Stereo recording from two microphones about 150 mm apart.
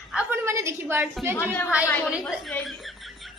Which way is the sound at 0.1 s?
10° right (ahead or behind).